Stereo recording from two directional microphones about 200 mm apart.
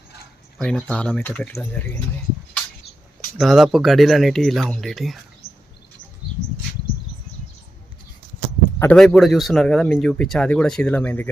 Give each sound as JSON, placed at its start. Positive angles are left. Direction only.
{"t": 0.6, "sound": "speech", "side_deg": 5}
{"t": 3.3, "sound": "speech", "side_deg": 0}
{"t": 5.4, "sound": "bird", "side_deg": 50}
{"t": 8.8, "sound": "speech", "side_deg": 5}